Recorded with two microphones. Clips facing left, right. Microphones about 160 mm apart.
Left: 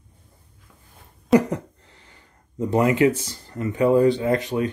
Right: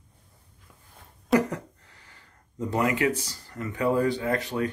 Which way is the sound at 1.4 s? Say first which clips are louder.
Left 5 dB; 20° left (ahead or behind).